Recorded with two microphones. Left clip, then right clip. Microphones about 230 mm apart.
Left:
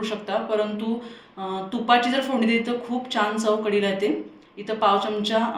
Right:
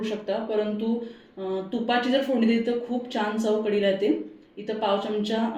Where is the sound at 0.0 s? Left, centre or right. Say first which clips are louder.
Left 2 dB; centre.